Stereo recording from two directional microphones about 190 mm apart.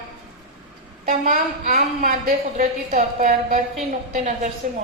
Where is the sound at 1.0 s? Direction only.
40° right (ahead or behind).